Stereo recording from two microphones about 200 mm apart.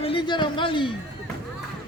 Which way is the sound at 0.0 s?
25° left (ahead or behind).